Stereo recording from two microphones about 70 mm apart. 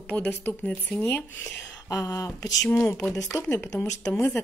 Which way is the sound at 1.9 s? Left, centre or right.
Left.